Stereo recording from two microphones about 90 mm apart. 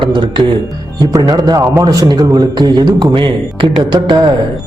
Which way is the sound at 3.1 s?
70° right (ahead or behind).